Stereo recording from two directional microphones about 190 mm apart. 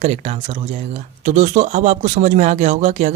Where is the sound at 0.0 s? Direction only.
35° right (ahead or behind).